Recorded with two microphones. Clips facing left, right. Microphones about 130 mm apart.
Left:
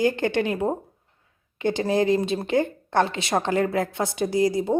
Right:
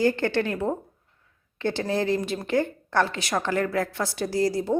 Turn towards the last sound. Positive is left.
turn(degrees=20)  # may be behind; listen again after turning